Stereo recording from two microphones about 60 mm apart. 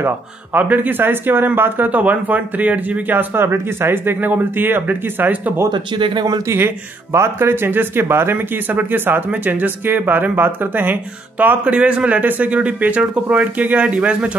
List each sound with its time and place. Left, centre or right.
0.0 s speech: right
6.5 s speech: right
11.6 s speech: centre